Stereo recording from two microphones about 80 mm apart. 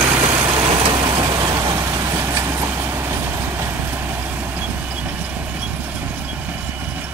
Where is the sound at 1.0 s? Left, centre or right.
Right.